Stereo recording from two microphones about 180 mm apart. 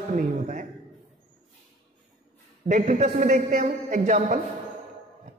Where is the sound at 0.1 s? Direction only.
40° right (ahead or behind).